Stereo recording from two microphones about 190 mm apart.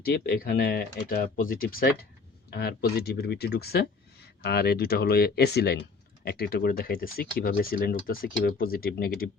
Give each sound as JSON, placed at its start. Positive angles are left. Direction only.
{"t": 0.0, "sound": "speech", "side_deg": 55}